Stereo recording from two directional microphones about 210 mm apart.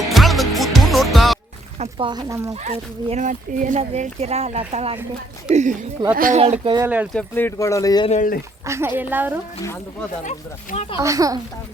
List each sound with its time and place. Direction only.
0.0 s music: centre (ahead or behind)
1.8 s speech: 25° right (ahead or behind)
2.6 s speech: 35° right (ahead or behind)
6.4 s speech: 25° right (ahead or behind)
6.8 s speech: 5° right (ahead or behind)
7.2 s speech: 10° left (ahead or behind)
8.1 s speech: 40° left (ahead or behind)
8.6 s speech: 15° right (ahead or behind)
10.2 s speech: 35° left (ahead or behind)
10.9 s speech: 15° right (ahead or behind)